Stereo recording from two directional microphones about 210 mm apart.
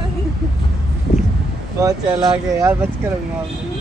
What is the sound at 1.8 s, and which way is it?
Speech, 15° right (ahead or behind).